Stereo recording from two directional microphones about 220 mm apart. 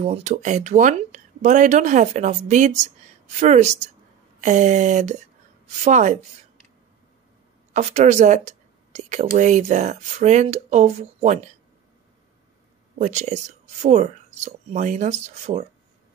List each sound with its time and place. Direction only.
0.0 s speech: 30° right (ahead or behind)
7.7 s speech: 30° right (ahead or behind)
13.0 s speech: 35° right (ahead or behind)